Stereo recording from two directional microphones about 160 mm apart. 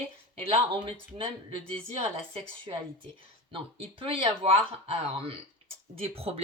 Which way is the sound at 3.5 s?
35° right (ahead or behind).